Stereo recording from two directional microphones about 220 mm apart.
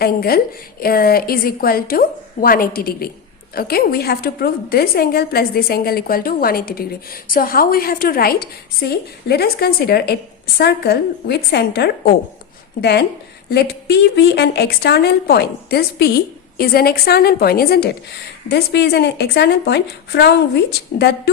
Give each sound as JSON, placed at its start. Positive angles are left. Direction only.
{"t": 0.0, "sound": "a woman's voice", "side_deg": 45}